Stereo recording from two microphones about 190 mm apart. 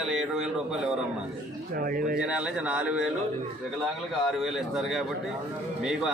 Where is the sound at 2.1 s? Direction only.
5° right (ahead or behind).